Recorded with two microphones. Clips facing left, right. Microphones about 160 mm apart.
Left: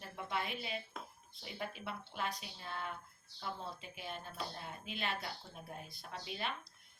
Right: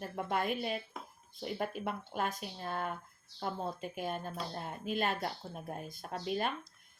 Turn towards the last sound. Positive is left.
turn(degrees=-45)  # may be behind; listen again after turning